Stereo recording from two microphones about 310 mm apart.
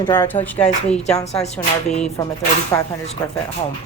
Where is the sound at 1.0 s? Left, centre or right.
Left.